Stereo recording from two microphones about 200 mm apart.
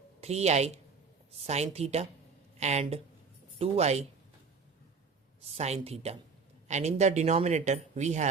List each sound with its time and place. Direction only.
0.2 s a woman's voice: 35° right (ahead or behind)
5.4 s speech: 30° right (ahead or behind)